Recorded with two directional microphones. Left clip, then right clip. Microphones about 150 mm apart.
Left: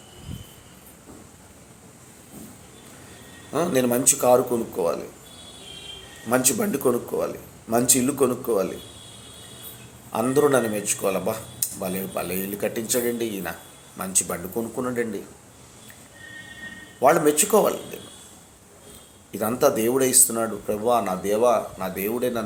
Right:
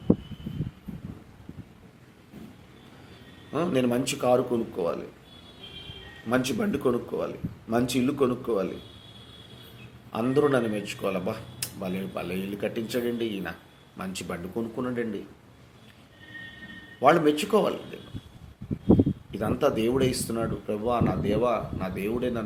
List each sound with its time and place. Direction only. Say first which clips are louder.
3.5 s speech: left 4 dB; 20° right (ahead or behind)
6.2 s speech: left 4 dB; 15° right (ahead or behind)
10.1 s speech: left 4 dB; 20° right (ahead or behind)
17.0 s speech: left 3 dB; 20° right (ahead or behind)
19.3 s speech: left 9 dB; 15° right (ahead or behind)